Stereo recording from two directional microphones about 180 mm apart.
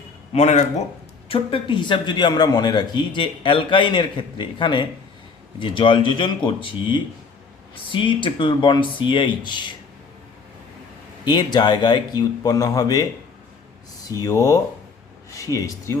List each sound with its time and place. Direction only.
0.3 s a man's voice: 40° left (ahead or behind)
11.3 s a man's voice: 25° left (ahead or behind)
14.1 s a man's voice: 20° left (ahead or behind)